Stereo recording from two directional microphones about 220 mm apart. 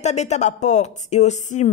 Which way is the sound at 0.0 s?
30° left (ahead or behind).